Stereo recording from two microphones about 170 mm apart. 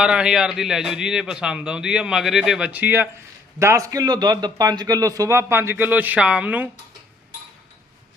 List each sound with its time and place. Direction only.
0.0 s a man's voice: 5° right (ahead or behind)